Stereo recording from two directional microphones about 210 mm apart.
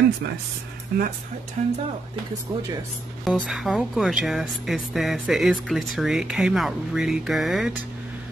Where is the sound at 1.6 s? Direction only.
35° right (ahead or behind).